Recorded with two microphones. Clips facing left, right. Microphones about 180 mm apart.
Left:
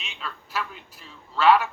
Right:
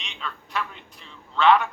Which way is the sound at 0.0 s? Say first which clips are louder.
Right 1 dB; 5° left (ahead or behind).